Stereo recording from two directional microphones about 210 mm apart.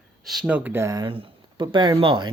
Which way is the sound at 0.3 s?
5° right (ahead or behind).